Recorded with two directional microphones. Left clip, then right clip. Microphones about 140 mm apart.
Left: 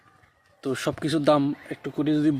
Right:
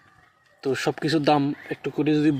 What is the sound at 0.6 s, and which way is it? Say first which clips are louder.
Speech: right 3 dB; 15° left (ahead or behind).